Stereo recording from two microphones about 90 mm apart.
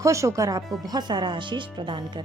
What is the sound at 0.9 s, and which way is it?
Speech, 55° right (ahead or behind).